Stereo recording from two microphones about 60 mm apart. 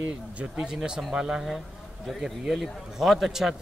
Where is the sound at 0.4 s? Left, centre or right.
Centre.